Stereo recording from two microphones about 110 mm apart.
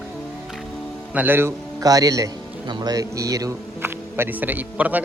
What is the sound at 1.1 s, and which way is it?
Speech, 20° right (ahead or behind).